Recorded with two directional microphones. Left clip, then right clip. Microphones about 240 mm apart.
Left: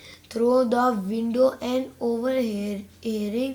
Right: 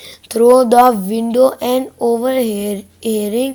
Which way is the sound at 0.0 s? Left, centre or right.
Right.